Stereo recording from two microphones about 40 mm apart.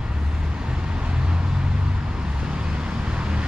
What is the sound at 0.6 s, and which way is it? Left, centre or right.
Vehicle, right.